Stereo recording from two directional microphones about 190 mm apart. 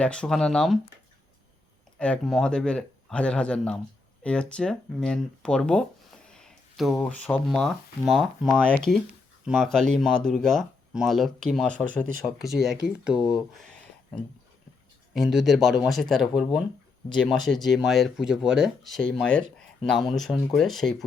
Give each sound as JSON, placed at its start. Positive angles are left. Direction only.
{"t": 0.0, "sound": "speech", "side_deg": 5}
{"t": 2.0, "sound": "speech", "side_deg": 5}
{"t": 6.3, "sound": "a sound", "side_deg": 0}
{"t": 6.9, "sound": "speech", "side_deg": 5}
{"t": 15.1, "sound": "speech", "side_deg": 0}